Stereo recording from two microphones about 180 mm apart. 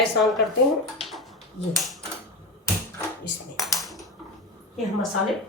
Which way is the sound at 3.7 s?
Centre (ahead or behind).